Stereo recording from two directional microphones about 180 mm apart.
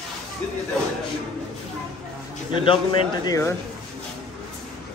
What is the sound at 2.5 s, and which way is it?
Speech, 30° left (ahead or behind).